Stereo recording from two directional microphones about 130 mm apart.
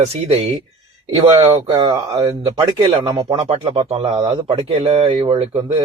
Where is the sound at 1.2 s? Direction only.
25° right (ahead or behind).